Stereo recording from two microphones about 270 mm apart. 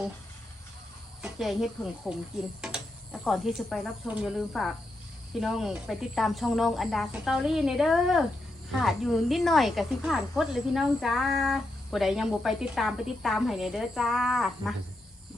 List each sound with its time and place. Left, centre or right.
1.2 s speech: centre